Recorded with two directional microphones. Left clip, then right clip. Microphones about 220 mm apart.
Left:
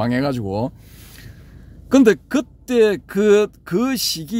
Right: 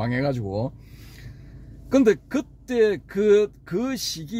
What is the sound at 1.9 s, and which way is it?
Speech, 40° left (ahead or behind).